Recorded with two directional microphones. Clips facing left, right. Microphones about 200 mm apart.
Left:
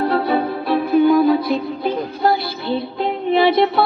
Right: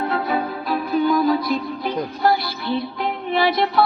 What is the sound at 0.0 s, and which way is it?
Music, 35° left (ahead or behind).